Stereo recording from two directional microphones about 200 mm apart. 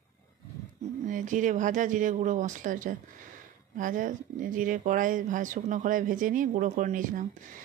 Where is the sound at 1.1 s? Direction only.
40° right (ahead or behind).